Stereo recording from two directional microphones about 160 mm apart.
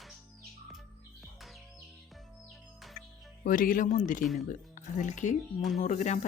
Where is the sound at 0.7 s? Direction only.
Centre (ahead or behind).